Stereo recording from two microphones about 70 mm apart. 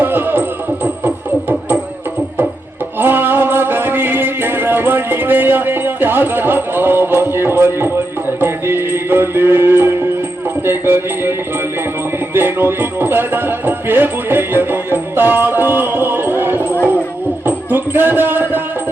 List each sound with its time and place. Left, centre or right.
0.0 s speech: right
1.0 s music: right
3.0 s music: right
17.4 s a sound: right